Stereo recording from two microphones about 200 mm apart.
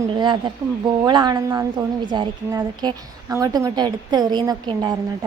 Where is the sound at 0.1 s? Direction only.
25° right (ahead or behind).